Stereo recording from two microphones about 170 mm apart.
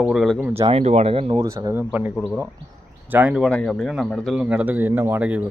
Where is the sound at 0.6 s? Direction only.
35° right (ahead or behind).